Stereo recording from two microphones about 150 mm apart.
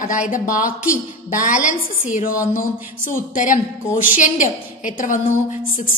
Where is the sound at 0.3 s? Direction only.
65° left (ahead or behind).